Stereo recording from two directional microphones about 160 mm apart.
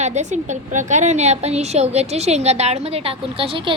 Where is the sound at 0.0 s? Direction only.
45° right (ahead or behind).